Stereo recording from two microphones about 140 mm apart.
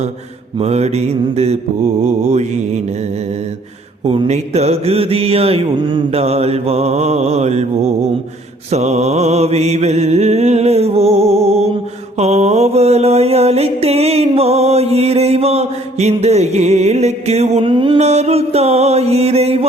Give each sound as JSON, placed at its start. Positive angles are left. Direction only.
{"t": 0.6, "sound": "mantra", "side_deg": -50}
{"t": 4.0, "sound": "mantra", "side_deg": -40}
{"t": 17.7, "sound": "music", "side_deg": -35}
{"t": 18.0, "sound": "mantra", "side_deg": -50}